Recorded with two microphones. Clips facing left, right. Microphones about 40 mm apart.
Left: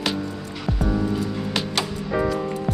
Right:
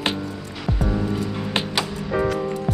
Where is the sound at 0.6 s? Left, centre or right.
Centre.